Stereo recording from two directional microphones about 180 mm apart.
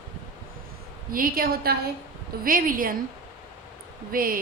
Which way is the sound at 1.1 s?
55° right (ahead or behind).